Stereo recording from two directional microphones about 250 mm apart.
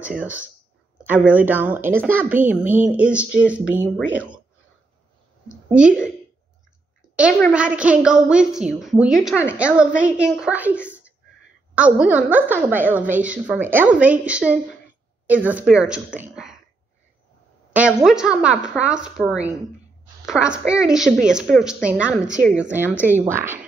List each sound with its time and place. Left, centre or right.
0.0 s a woman's voice: centre
5.7 s a woman's voice: centre
7.3 s a woman's voice: centre
17.7 s a woman's voice: centre
22.2 s a woman's voice: right
22.6 s speech: centre